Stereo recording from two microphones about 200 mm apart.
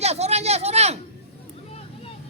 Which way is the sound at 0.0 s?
30° right (ahead or behind).